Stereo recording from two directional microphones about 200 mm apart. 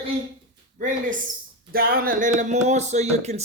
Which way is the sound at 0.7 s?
40° right (ahead or behind).